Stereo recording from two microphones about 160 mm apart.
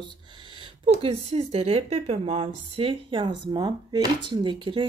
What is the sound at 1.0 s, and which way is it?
Speech, 40° right (ahead or behind).